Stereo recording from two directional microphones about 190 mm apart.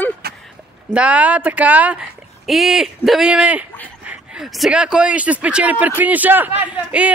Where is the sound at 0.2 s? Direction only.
55° right (ahead or behind).